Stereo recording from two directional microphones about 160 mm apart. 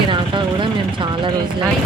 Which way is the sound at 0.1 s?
30° right (ahead or behind).